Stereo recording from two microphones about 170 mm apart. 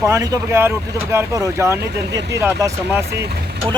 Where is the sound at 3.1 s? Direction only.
70° right (ahead or behind).